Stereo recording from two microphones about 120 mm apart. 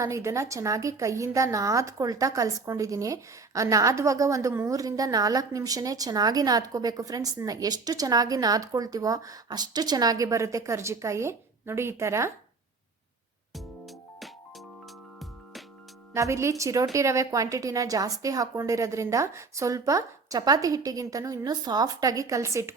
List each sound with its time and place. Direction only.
0.0 s a woman's voice: 25° right (ahead or behind)
13.5 s music: centre (ahead or behind)
16.1 s a woman's voice: 25° right (ahead or behind)